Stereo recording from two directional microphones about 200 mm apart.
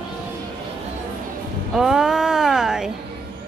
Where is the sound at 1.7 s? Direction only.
Centre (ahead or behind).